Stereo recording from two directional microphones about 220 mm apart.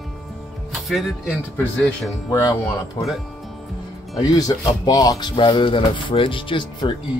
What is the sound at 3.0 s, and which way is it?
Speech, 25° left (ahead or behind).